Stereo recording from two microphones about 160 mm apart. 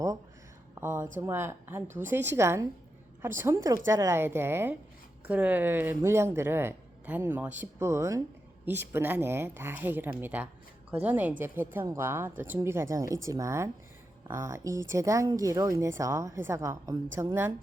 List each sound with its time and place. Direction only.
0.8 s speech: 15° right (ahead or behind)